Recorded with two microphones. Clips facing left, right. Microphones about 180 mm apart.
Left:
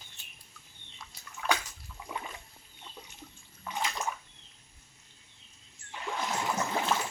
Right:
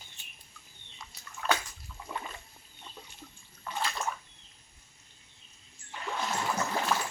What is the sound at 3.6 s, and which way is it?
Bathtub, 15° left (ahead or behind).